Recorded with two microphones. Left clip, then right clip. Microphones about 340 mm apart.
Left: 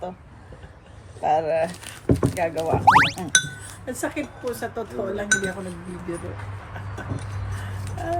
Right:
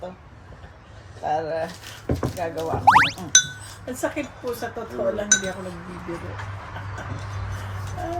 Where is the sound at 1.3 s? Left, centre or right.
Left.